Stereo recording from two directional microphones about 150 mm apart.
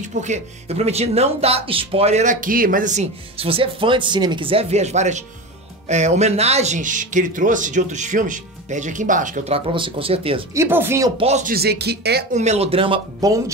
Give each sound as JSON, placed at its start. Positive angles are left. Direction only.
{"t": 0.0, "sound": "speech", "side_deg": -50}
{"t": 3.3, "sound": "speech", "side_deg": -40}
{"t": 9.5, "sound": "speech", "side_deg": -35}
{"t": 10.5, "sound": "speech", "side_deg": -15}
{"t": 11.1, "sound": "speech", "side_deg": -45}
{"t": 11.4, "sound": "speech", "side_deg": -90}
{"t": 12.3, "sound": "speech", "side_deg": -50}